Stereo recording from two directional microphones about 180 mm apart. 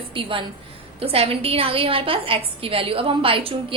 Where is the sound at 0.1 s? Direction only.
30° right (ahead or behind).